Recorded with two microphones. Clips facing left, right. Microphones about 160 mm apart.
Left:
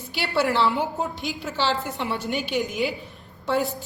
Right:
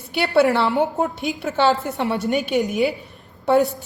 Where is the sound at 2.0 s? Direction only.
50° right (ahead or behind).